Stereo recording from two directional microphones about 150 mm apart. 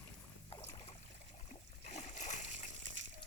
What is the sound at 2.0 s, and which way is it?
Splash, 50° left (ahead or behind).